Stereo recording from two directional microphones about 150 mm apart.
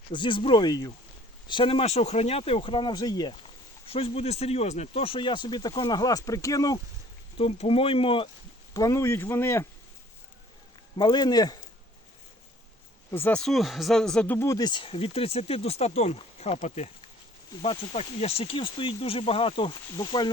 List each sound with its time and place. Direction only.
0.1 s speech: 30° left (ahead or behind)
2.9 s speech: 25° left (ahead or behind)
7.3 s speech: 40° left (ahead or behind)
8.7 s speech: 25° left (ahead or behind)
10.9 s speech: 30° left (ahead or behind)
13.1 s speech: 15° left (ahead or behind)
13.4 s speech: centre (ahead or behind)
14.3 s speech: 20° left (ahead or behind)